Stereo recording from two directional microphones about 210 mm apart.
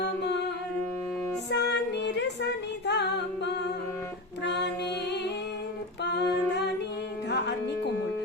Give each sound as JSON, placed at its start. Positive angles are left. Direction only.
{"t": 1.5, "sound": "music", "side_deg": 55}
{"t": 6.0, "sound": "music", "side_deg": 55}
{"t": 7.3, "sound": "music", "side_deg": 55}